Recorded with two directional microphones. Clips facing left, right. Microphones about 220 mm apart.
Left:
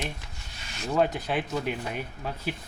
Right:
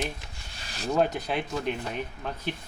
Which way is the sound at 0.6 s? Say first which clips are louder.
Right 1 dB; 35° right (ahead or behind).